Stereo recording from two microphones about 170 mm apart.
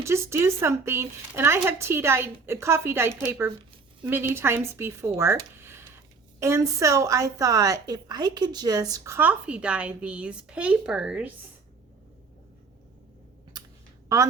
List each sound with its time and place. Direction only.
0.0 s a woman's voice: 15° right (ahead or behind)
13.5 s clicking: 25° right (ahead or behind)